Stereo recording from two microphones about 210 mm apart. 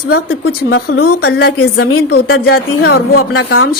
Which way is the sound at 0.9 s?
50° left (ahead or behind).